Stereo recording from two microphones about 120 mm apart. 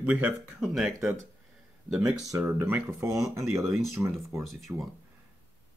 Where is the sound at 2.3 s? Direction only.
20° right (ahead or behind).